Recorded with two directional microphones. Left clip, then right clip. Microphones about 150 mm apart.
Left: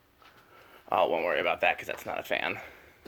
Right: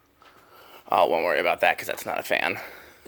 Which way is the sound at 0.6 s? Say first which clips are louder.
Right 5 dB; 40° right (ahead or behind).